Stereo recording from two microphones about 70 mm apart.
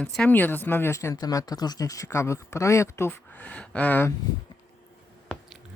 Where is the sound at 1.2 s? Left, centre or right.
Left.